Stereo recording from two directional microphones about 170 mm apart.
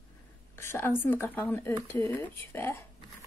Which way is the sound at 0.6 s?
15° left (ahead or behind).